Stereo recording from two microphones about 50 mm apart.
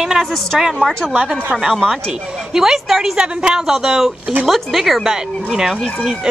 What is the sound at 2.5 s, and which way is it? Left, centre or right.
Speech, centre.